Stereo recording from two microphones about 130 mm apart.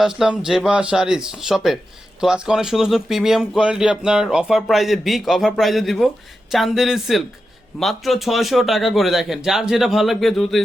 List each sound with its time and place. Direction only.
0.0 s speech: 5° right (ahead or behind)